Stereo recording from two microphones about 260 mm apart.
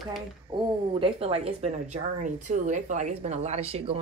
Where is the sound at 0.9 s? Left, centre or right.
Right.